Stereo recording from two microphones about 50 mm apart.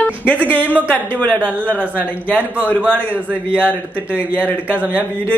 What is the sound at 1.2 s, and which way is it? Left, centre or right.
Speech, left.